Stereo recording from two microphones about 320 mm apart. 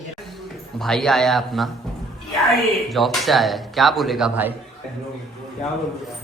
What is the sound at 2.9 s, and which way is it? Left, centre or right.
Speech, centre.